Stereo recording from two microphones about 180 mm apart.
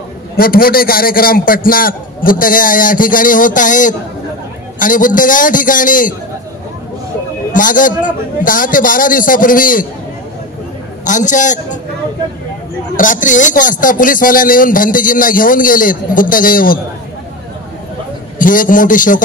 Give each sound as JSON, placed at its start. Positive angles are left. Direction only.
{"t": 0.4, "sound": "speech", "side_deg": 55}
{"t": 7.5, "sound": "speech", "side_deg": 45}
{"t": 11.1, "sound": "speech", "side_deg": 45}
{"t": 12.9, "sound": "speech", "side_deg": 45}
{"t": 18.4, "sound": "speech", "side_deg": 50}